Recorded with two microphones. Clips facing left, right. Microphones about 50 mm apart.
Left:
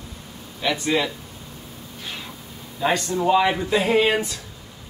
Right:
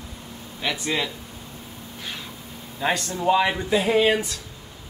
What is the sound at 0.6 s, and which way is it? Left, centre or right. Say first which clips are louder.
Speech: left 4 dB; centre.